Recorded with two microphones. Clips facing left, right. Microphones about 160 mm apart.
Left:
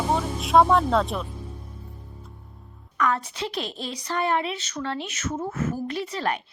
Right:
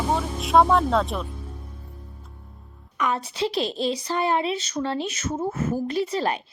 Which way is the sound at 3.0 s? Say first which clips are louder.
Even; 25° right (ahead or behind).